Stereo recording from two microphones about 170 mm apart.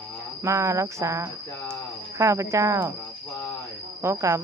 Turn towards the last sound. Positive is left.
turn(degrees=-15)  # may be behind; listen again after turning